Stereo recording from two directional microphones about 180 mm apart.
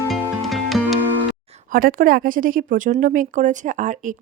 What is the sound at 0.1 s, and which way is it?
Music, centre (ahead or behind).